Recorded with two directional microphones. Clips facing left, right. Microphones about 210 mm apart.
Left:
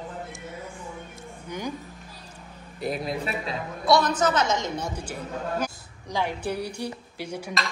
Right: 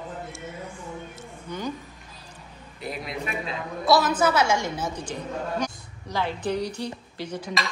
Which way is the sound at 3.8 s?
5° right (ahead or behind).